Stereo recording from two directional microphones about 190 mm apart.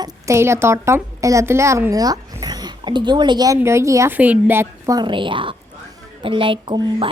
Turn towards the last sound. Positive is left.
turn(degrees=-25)  # may be behind; listen again after turning